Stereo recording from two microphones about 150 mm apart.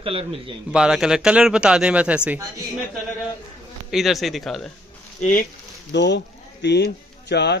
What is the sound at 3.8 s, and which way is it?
Speech, centre (ahead or behind).